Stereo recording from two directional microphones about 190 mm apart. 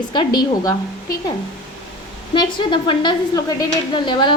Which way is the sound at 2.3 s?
25° left (ahead or behind).